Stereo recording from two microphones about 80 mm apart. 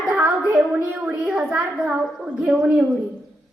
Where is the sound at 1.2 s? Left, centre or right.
Centre.